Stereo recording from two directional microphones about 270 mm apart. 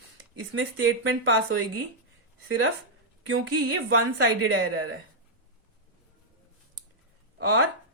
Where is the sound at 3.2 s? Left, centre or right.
Right.